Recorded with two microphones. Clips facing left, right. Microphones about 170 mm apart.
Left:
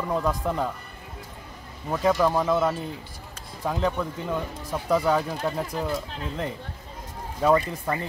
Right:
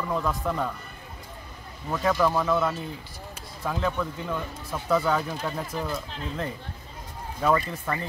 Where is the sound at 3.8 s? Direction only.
15° left (ahead or behind).